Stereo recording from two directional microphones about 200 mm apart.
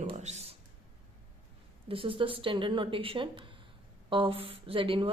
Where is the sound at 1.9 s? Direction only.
25° right (ahead or behind).